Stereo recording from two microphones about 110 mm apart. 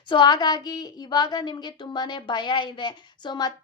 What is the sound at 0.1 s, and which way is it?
A woman's voice, 45° left (ahead or behind).